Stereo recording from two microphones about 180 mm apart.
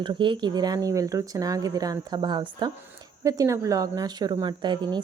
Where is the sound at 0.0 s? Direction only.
25° right (ahead or behind).